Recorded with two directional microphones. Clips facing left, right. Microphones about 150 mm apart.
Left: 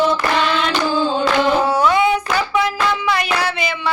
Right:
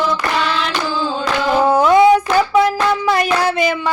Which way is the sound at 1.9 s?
40° right (ahead or behind).